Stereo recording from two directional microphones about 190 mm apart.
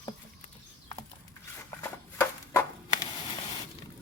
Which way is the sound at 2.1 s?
15° left (ahead or behind).